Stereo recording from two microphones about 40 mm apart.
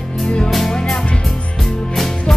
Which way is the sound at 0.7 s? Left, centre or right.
Centre.